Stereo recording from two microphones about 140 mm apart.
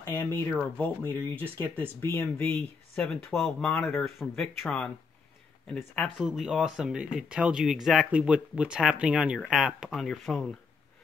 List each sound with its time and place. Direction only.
0.0 s speech: 15° left (ahead or behind)
6.1 s speech: centre (ahead or behind)